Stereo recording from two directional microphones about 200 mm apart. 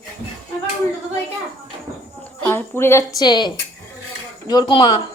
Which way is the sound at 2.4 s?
10° left (ahead or behind).